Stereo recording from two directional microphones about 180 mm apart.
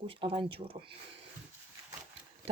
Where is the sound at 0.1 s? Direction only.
30° right (ahead or behind).